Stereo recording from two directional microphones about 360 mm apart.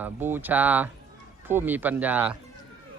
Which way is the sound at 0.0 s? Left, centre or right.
Centre.